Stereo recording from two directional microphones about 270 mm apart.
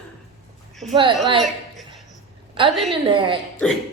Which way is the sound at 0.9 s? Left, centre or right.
Centre.